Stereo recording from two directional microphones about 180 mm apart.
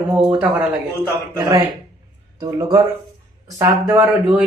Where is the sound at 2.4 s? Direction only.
20° right (ahead or behind).